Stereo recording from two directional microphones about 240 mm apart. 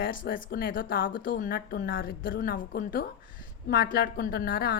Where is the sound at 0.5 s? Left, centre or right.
Left.